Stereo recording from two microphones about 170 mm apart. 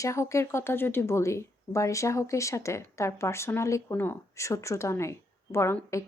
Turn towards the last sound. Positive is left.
turn(degrees=15)  # may be behind; listen again after turning